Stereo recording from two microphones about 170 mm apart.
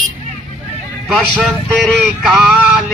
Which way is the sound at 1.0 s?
Centre (ahead or behind).